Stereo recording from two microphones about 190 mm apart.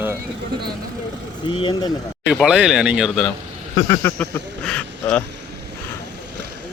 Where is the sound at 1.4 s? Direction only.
25° left (ahead or behind).